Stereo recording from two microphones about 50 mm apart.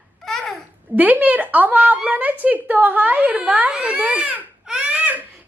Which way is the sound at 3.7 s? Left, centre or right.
Centre.